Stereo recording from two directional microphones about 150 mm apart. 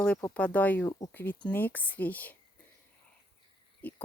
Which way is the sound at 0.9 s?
25° left (ahead or behind).